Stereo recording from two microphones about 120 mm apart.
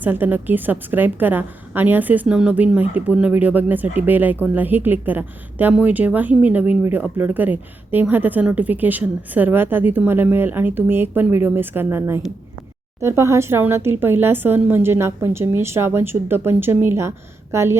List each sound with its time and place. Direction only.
0.0 s a woman's voice: 15° right (ahead or behind)